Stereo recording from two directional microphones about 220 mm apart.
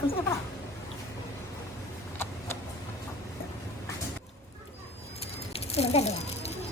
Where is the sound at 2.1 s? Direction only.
10° left (ahead or behind).